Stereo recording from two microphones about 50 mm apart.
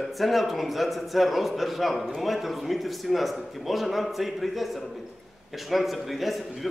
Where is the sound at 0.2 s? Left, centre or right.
Centre.